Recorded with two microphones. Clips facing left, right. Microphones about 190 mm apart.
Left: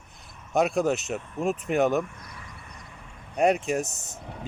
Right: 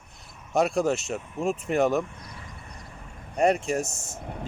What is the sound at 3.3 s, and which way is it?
Speech, 5° left (ahead or behind).